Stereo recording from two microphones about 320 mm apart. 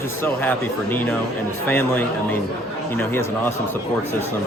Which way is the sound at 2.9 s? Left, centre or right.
Centre.